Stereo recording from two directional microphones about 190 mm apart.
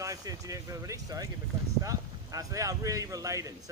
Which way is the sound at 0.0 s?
20° right (ahead or behind).